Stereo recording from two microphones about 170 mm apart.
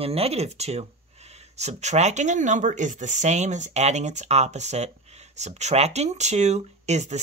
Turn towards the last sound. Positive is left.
turn(degrees=-40)  # may be behind; listen again after turning